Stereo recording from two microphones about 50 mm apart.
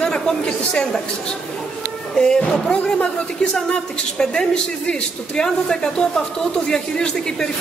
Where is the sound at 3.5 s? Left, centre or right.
Centre.